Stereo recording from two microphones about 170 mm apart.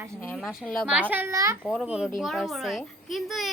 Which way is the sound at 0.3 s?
Centre (ahead or behind).